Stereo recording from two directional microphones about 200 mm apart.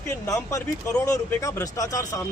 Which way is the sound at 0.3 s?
15° left (ahead or behind).